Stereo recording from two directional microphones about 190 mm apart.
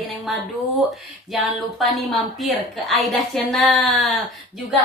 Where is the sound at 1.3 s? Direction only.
Centre (ahead or behind).